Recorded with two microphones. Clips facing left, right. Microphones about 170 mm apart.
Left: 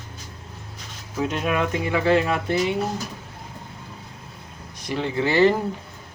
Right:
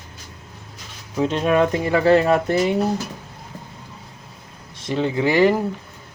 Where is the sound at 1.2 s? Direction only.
30° right (ahead or behind).